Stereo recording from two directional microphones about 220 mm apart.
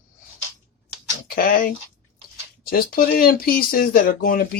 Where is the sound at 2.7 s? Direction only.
40° left (ahead or behind).